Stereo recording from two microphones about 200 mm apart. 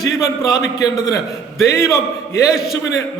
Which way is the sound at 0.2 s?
15° left (ahead or behind).